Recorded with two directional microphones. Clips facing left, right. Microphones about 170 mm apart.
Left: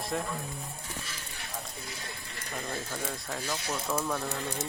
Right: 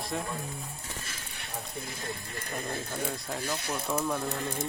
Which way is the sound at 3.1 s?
Centre (ahead or behind).